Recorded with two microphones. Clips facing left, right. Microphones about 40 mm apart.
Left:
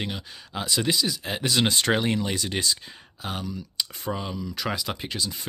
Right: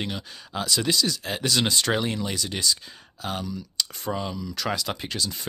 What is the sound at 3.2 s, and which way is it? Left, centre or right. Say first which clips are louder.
Speech: right 2 dB; centre.